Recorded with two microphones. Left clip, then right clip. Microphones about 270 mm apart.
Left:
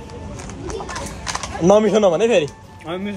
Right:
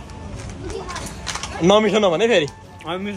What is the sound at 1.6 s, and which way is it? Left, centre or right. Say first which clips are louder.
Speech: left 2 dB; right.